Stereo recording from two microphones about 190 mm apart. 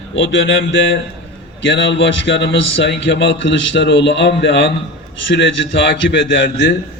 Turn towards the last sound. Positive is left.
turn(degrees=70)  # may be behind; listen again after turning